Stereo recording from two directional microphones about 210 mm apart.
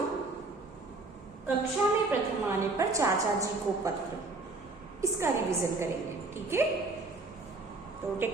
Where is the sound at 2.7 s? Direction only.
15° right (ahead or behind).